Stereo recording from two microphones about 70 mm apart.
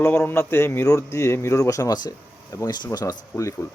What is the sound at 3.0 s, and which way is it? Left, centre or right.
Speech, left.